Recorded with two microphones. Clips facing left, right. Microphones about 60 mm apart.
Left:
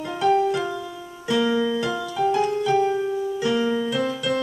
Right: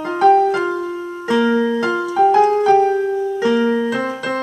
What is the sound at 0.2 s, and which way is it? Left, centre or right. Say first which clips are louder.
Music: right 7 dB; right.